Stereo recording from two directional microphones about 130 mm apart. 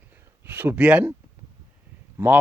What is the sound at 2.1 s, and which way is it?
Speech, 15° right (ahead or behind).